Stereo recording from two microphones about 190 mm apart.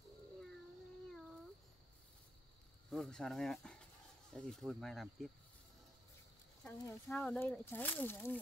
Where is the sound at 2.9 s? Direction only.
Centre (ahead or behind).